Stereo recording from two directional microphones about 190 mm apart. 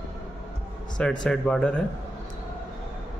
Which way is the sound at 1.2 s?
5° left (ahead or behind).